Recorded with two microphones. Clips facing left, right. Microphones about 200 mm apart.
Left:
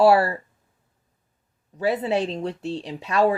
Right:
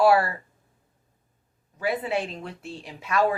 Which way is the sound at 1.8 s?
35° left (ahead or behind).